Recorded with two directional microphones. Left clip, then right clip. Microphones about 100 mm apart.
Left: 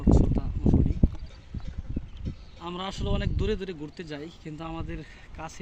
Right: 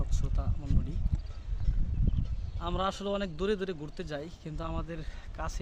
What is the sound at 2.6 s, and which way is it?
A man's voice, 60° right (ahead or behind).